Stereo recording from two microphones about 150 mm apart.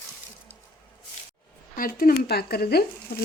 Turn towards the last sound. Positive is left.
turn(degrees=90)